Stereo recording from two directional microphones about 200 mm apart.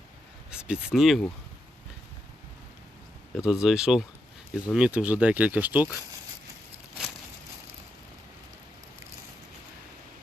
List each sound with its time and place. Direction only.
0.5 s speech: 5° right (ahead or behind)
3.3 s speech: 5° right (ahead or behind)